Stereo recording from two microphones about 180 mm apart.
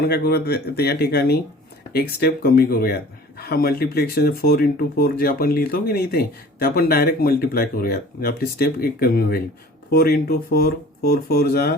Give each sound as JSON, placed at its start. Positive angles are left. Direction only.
{"t": 0.0, "sound": "a man's voice", "side_deg": 60}